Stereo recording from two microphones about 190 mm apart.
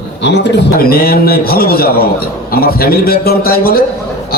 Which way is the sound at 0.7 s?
50° left (ahead or behind).